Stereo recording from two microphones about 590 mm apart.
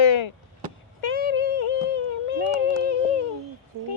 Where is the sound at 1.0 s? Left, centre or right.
Left.